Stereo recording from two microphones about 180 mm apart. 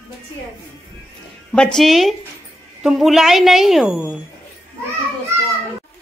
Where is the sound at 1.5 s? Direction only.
5° left (ahead or behind).